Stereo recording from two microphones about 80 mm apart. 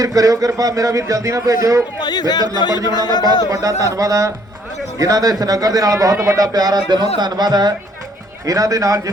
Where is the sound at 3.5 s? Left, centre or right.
Right.